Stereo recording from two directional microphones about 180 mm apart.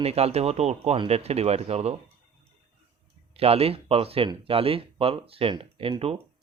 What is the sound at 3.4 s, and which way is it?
A man's voice, 35° right (ahead or behind).